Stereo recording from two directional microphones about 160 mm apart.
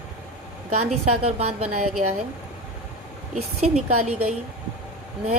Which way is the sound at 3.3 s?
45° right (ahead or behind).